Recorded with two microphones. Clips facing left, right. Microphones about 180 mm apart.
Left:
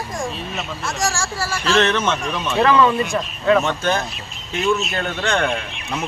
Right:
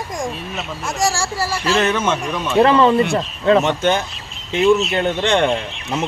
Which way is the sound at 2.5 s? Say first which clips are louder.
Right 3 dB; 30° right (ahead or behind).